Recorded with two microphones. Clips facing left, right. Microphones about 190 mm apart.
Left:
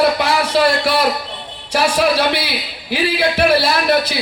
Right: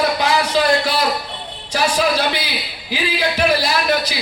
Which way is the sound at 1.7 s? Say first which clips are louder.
Left 3 dB; 65° left (ahead or behind).